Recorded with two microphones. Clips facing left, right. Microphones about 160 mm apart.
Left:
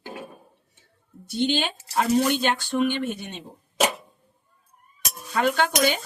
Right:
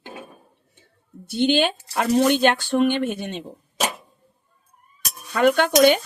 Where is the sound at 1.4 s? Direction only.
55° right (ahead or behind).